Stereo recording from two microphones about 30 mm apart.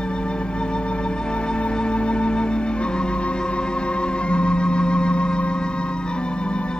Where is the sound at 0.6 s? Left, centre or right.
Left.